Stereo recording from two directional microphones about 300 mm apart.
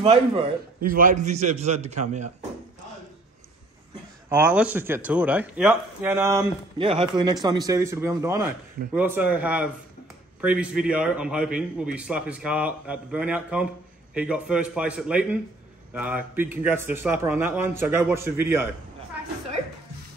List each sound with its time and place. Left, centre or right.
0.0 s speech: centre
0.7 s a man's voice: right
4.3 s a man's voice: centre